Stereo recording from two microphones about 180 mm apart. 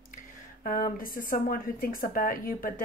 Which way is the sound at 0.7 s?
50° left (ahead or behind).